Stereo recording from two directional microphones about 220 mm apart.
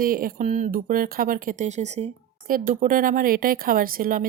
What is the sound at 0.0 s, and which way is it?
Speech, 40° right (ahead or behind).